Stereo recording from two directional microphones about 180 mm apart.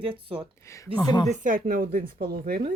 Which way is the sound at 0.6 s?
15° left (ahead or behind).